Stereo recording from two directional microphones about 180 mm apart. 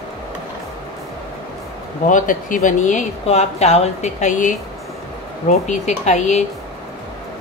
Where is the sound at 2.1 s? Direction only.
45° left (ahead or behind).